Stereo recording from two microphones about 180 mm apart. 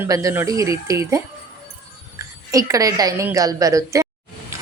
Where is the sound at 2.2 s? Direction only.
20° right (ahead or behind).